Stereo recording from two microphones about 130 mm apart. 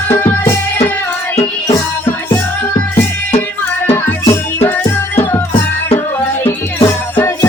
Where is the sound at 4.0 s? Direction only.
20° left (ahead or behind).